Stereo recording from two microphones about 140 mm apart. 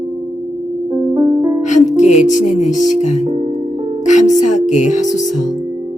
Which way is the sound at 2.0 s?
60° left (ahead or behind).